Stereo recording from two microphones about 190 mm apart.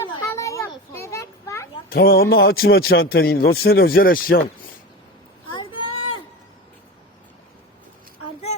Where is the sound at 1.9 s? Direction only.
50° left (ahead or behind).